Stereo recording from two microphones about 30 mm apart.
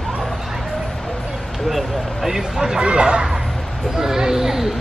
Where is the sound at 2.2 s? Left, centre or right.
Centre.